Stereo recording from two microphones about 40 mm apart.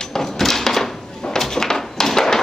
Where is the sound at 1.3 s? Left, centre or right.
Centre.